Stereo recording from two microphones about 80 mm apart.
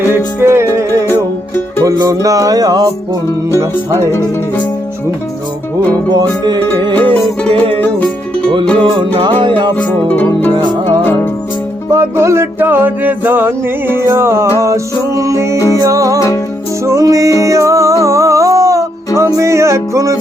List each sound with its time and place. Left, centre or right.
0.3 s music: right
6.1 s music: right
6.9 s music: left
9.1 s music: right
9.7 s music: left
10.5 s music: right
11.0 s music: left
11.9 s a sound: right
14.6 s music: right
15.5 s music: left
15.8 s music: right